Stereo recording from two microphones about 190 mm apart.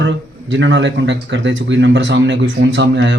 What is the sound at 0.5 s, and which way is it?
A man's voice, 75° right (ahead or behind).